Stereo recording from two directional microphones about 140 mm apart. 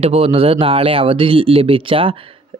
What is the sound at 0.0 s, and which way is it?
Speech, 45° right (ahead or behind).